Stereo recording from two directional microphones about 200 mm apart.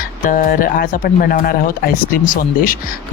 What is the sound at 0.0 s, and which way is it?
Speech, 45° left (ahead or behind).